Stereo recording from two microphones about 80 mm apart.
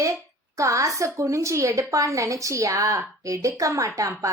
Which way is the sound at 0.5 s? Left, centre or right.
Right.